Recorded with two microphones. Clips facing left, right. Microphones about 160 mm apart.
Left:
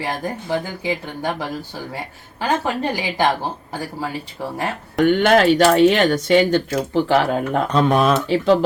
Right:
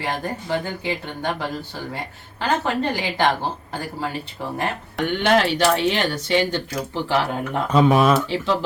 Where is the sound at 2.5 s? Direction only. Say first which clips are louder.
Left 1 dB; 10° left (ahead or behind).